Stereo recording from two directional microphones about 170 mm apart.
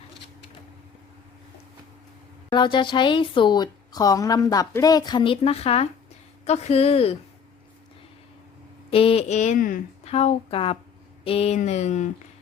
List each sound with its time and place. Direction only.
2.5 s speech: 25° left (ahead or behind)
8.9 s speech: 35° left (ahead or behind); by 10.1 s 55° left (ahead or behind)
10.1 s speech: 40° left (ahead or behind)